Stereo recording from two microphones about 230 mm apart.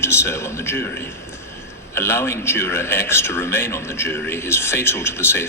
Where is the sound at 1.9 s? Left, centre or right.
Centre.